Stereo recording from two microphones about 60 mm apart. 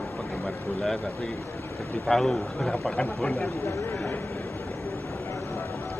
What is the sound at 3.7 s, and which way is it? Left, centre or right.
Speech, left.